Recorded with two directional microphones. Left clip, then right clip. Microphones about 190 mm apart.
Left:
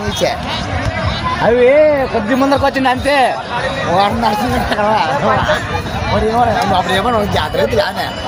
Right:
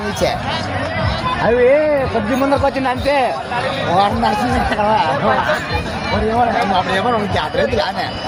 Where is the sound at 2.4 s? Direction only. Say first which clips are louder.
Left 3 dB; 55° left (ahead or behind).